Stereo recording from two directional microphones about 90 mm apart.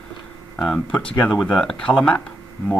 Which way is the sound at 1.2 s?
Centre (ahead or behind).